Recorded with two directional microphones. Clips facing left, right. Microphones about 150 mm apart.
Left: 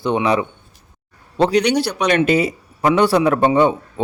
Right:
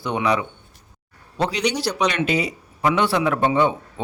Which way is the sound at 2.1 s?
50° left (ahead or behind).